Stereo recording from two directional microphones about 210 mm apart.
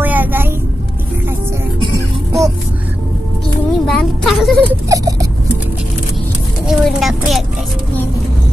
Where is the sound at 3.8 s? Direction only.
Centre (ahead or behind).